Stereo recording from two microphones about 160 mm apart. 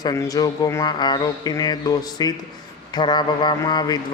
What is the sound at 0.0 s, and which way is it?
A man's voice, 20° left (ahead or behind).